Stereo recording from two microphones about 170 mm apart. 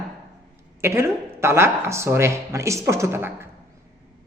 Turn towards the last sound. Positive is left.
turn(degrees=-15)  # may be behind; listen again after turning